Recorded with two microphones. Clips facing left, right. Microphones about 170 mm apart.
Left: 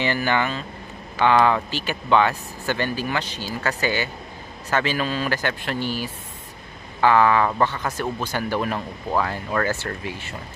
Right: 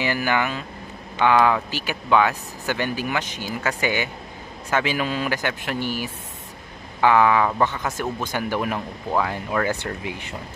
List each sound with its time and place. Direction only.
0.0 s speech: 10° right (ahead or behind)